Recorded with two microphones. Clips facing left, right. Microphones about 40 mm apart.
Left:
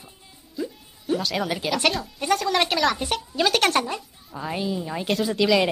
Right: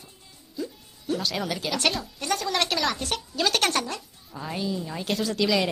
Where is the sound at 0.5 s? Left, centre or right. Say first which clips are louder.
Left 3 dB; centre.